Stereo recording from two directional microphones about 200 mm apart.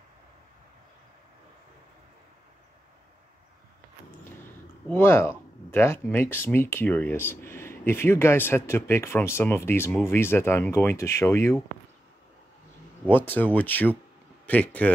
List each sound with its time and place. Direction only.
4.8 s speech: 10° left (ahead or behind)
13.1 s speech: 10° left (ahead or behind)